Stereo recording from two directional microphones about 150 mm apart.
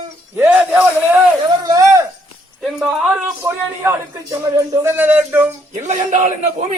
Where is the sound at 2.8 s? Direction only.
Centre (ahead or behind).